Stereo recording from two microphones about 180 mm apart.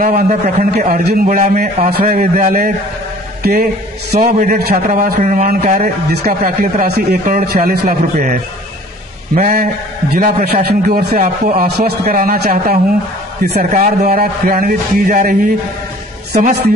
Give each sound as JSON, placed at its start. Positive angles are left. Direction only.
{"t": 0.0, "sound": "a man's voice", "side_deg": -55}
{"t": 4.2, "sound": "a man's voice", "side_deg": -50}